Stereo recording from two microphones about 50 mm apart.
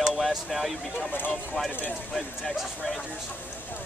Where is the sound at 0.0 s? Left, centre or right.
Centre.